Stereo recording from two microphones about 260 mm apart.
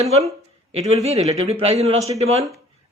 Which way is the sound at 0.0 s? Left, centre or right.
Right.